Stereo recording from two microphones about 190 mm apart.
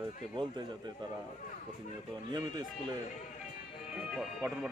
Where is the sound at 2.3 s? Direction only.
20° right (ahead or behind).